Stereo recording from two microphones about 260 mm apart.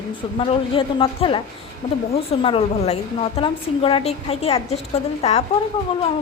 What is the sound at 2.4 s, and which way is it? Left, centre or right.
A woman's voice, left.